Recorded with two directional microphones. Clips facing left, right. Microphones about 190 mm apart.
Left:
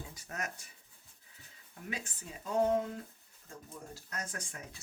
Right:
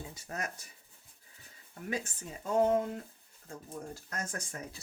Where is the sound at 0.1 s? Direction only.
35° right (ahead or behind).